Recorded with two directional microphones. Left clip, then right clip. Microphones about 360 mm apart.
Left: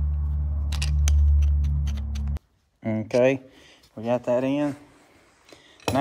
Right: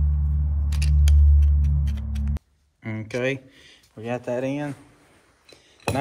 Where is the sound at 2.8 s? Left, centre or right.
Centre.